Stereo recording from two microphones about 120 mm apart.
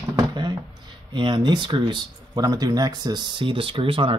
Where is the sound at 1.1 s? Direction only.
40° right (ahead or behind).